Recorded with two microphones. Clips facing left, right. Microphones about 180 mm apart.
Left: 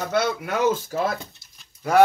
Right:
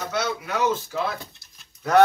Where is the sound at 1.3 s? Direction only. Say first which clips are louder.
Even; 5° left (ahead or behind).